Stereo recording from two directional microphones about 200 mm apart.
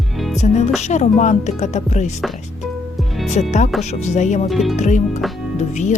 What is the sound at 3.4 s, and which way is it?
Speech, 35° left (ahead or behind).